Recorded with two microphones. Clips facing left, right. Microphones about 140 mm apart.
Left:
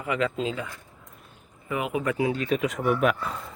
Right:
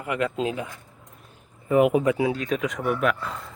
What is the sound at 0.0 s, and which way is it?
Speech, 10° right (ahead or behind).